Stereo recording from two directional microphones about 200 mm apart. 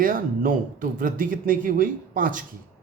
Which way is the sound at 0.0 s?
45° right (ahead or behind).